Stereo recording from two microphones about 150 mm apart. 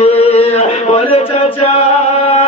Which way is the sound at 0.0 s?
45° left (ahead or behind).